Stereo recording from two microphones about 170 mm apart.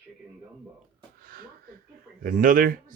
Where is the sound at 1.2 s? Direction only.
60° right (ahead or behind).